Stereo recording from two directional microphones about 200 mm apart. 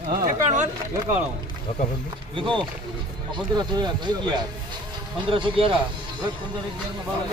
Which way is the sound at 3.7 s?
20° right (ahead or behind).